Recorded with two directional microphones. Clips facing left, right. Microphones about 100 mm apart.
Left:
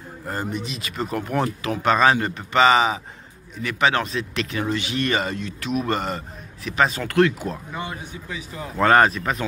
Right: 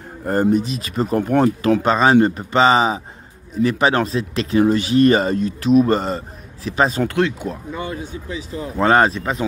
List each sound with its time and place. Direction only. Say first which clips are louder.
0.2 s speech: right 11 dB; 45° right (ahead or behind)
7.1 s speech: left 1 dB; 20° right (ahead or behind)
8.4 s speech: right 2 dB; 30° right (ahead or behind)